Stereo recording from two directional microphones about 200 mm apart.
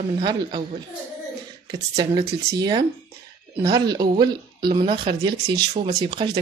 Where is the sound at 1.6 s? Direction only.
20° right (ahead or behind).